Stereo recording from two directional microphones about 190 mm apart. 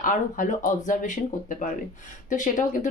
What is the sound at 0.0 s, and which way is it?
Speech, 45° left (ahead or behind).